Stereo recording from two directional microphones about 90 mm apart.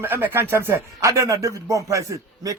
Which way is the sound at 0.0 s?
20° right (ahead or behind).